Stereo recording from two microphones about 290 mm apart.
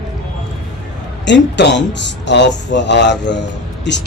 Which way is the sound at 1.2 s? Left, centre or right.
Left.